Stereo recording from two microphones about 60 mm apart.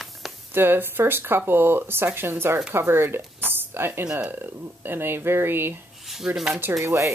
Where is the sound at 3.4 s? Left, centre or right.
Right.